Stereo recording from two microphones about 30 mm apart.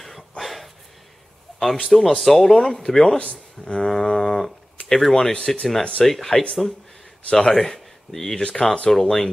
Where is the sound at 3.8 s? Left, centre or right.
Centre.